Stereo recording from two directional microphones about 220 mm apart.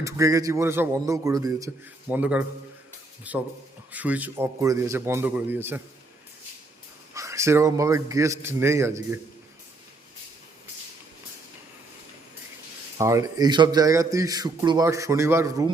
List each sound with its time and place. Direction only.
0.0 s speech: 15° right (ahead or behind)
7.1 s speech: 15° right (ahead or behind)
13.0 s speech: 15° right (ahead or behind)